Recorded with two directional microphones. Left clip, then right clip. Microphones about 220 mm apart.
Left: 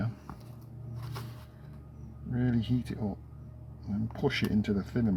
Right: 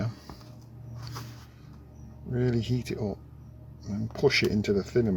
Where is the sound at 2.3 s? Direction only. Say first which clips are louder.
Right 3 dB; 15° right (ahead or behind).